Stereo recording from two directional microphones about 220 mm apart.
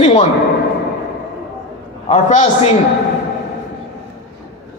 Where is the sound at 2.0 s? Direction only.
30° left (ahead or behind).